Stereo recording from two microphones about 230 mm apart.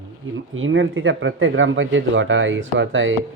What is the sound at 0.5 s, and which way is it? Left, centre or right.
Speech, right.